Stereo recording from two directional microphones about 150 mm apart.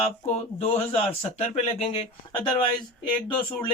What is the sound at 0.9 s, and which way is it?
Speech, 40° left (ahead or behind).